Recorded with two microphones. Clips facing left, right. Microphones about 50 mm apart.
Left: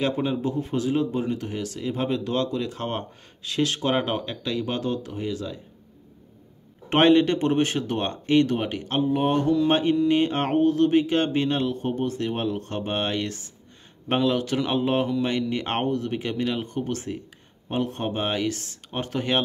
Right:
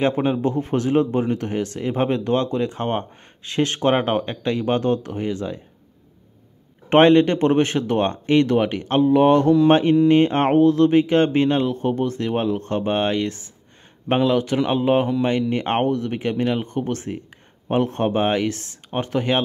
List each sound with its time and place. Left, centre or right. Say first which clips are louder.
0.0 s speech: right 5 dB; right
6.9 s speech: right 4 dB; right
10.6 s speech: right 3 dB; right
12.2 s speech: right 5 dB; right